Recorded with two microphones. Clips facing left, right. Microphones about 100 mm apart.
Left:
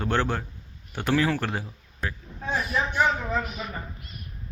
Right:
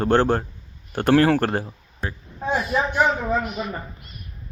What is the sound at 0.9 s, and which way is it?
Speech, 50° right (ahead or behind).